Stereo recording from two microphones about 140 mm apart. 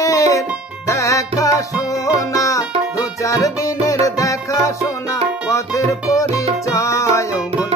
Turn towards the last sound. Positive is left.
turn(degrees=25)  # may be behind; listen again after turning